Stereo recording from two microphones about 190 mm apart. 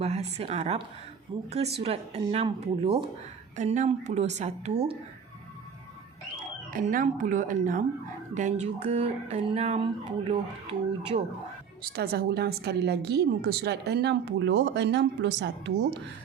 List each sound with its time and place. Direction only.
0.0 s speech: 35° right (ahead or behind)
6.7 s speech: 45° right (ahead or behind); by 11.2 s 30° right (ahead or behind)
11.8 s a woman's voice: 55° right (ahead or behind)